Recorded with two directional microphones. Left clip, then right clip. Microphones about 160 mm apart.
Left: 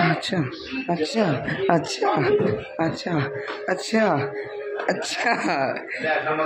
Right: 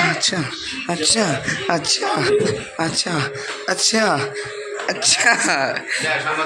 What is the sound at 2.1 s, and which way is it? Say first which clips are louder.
Speech: right 3 dB; 5° left (ahead or behind).